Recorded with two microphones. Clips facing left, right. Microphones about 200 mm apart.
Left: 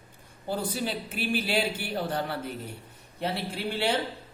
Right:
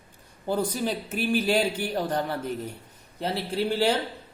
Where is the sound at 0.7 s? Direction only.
45° right (ahead or behind).